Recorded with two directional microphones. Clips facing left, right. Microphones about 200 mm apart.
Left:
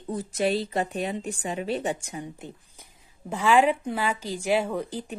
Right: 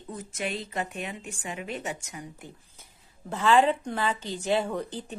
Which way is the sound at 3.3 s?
10° left (ahead or behind).